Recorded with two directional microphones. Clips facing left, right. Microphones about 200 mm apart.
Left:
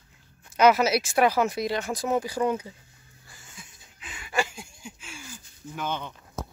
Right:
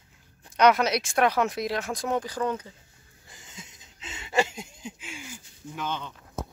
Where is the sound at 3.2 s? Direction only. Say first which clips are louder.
Right 3 dB; 20° right (ahead or behind).